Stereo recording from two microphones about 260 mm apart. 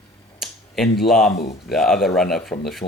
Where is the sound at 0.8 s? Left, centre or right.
Left.